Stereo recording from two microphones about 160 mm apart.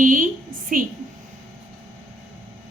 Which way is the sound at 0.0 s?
55° right (ahead or behind).